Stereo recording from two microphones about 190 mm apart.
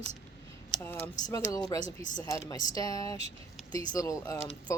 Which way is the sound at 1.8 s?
40° left (ahead or behind).